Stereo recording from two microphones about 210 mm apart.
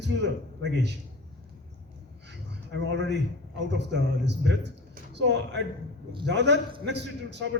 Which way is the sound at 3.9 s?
55° right (ahead or behind).